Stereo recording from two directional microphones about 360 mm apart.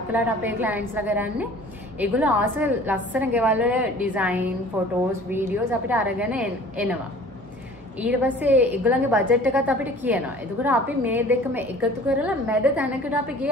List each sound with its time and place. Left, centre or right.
0.1 s a woman's voice: centre
8.0 s a woman's voice: centre